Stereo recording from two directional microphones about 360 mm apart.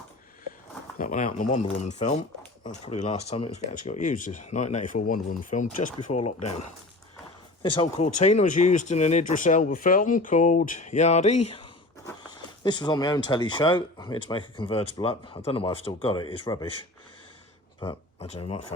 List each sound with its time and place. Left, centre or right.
0.9 s speech: left
7.8 s speech: centre
17.7 s speech: centre